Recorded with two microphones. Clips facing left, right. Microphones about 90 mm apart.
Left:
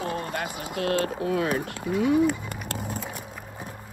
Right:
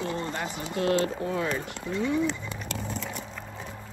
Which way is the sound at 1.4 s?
10° left (ahead or behind).